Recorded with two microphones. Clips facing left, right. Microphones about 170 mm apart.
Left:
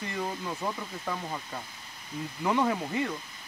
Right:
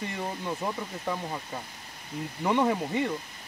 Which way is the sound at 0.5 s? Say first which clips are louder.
Right 2 dB; 10° right (ahead or behind).